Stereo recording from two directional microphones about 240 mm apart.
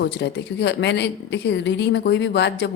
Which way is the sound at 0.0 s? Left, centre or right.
Left.